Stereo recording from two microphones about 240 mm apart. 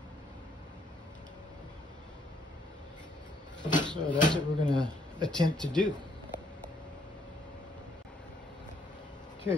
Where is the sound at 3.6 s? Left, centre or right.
Centre.